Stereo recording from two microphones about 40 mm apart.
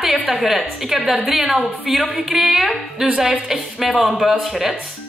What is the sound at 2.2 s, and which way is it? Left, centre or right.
A woman's voice, centre.